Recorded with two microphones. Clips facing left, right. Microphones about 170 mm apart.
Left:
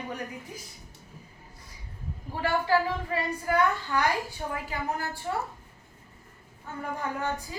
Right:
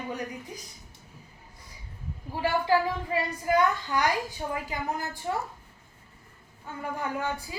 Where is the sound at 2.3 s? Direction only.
10° right (ahead or behind).